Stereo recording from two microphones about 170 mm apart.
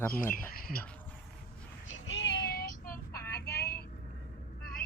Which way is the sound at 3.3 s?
70° left (ahead or behind).